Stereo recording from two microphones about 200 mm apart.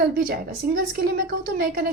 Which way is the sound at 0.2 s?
45° right (ahead or behind).